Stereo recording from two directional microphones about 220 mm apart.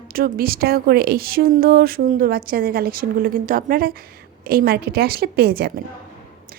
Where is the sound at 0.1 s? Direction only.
40° right (ahead or behind).